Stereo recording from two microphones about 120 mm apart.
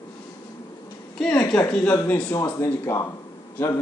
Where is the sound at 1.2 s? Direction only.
10° left (ahead or behind).